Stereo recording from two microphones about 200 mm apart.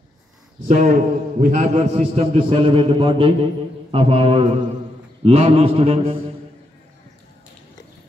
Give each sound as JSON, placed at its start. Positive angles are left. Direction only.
{"t": 0.7, "sound": "a man's voice", "side_deg": -40}